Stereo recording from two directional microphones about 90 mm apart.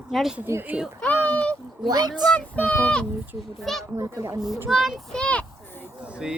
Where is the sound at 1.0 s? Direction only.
20° left (ahead or behind).